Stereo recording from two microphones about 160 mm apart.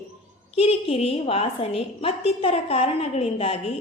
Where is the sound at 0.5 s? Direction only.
35° left (ahead or behind).